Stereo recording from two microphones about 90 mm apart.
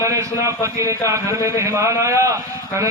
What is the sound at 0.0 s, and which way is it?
A man's voice, 35° right (ahead or behind).